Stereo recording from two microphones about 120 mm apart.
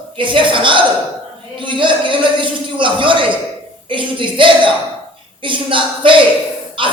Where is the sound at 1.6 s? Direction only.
45° right (ahead or behind).